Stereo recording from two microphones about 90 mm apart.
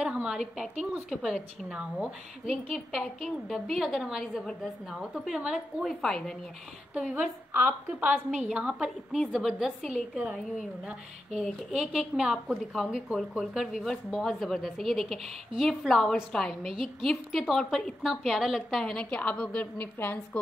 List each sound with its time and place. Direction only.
0.0 s a woman's voice: 10° right (ahead or behind)
5.9 s a woman's voice: 5° left (ahead or behind)
7.2 s a woman's voice: 15° right (ahead or behind); by 20.2 s 20° left (ahead or behind)